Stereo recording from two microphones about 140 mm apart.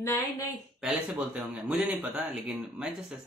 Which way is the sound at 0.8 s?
10° right (ahead or behind).